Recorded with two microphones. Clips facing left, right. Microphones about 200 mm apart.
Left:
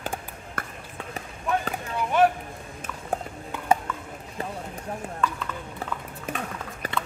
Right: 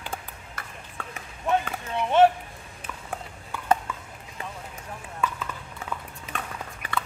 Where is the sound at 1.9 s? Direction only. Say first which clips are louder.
Right 3 dB; 25° right (ahead or behind).